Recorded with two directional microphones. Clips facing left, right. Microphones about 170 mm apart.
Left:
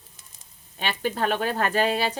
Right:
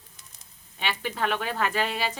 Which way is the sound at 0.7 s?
40° left (ahead or behind).